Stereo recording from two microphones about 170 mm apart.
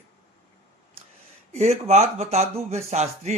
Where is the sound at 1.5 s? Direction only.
40° right (ahead or behind).